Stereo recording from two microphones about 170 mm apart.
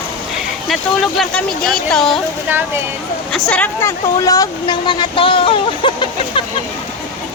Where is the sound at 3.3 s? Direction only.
5° left (ahead or behind).